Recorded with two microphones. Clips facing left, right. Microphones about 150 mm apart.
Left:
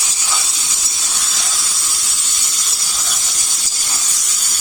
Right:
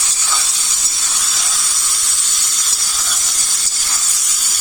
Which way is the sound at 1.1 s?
Centre (ahead or behind).